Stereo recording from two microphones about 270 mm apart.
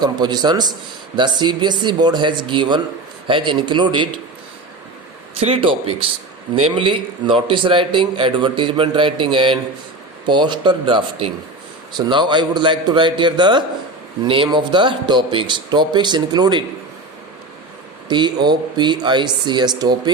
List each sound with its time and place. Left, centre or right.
0.0 s a woman's voice: centre
5.4 s a man's voice: right
18.1 s a woman's voice: centre